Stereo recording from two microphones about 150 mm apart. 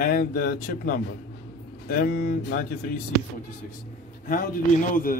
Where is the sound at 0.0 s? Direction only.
85° left.